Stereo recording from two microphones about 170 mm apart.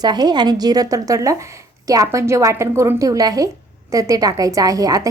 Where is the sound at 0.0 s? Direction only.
25° right (ahead or behind).